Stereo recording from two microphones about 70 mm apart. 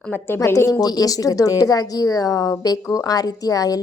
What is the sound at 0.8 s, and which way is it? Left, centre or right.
A woman's voice, left.